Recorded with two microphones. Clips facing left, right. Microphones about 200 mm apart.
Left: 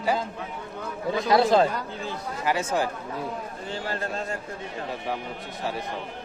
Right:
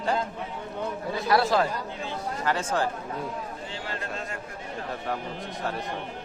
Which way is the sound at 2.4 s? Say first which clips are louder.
Left 2 dB; 10° left (ahead or behind).